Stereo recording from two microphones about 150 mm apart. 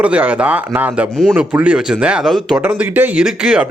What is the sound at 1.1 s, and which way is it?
Speech, centre (ahead or behind).